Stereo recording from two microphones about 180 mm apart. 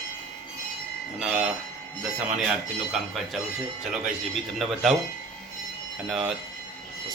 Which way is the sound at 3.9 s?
Centre (ahead or behind).